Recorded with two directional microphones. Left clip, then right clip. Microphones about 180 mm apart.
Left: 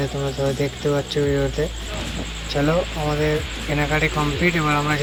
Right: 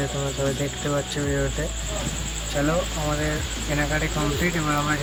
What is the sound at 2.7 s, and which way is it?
Speech, 10° left (ahead or behind).